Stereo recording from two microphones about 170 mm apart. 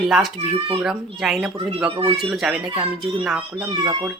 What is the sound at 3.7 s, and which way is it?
Speech, 20° right (ahead or behind).